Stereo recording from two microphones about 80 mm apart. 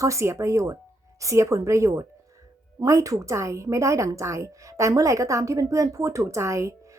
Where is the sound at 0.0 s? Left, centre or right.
Right.